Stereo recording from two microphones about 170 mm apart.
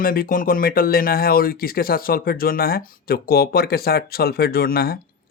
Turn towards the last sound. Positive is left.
turn(degrees=65)  # may be behind; listen again after turning